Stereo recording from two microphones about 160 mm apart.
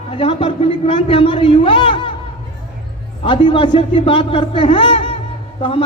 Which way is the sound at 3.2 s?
30° left (ahead or behind).